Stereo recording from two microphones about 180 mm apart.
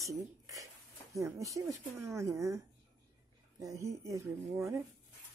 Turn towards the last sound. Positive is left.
turn(degrees=-15)  # may be behind; listen again after turning